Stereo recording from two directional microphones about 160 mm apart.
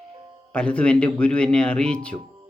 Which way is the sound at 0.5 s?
5° left (ahead or behind).